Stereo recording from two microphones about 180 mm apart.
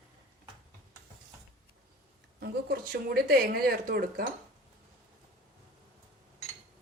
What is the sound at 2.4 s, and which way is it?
Speech, 60° right (ahead or behind).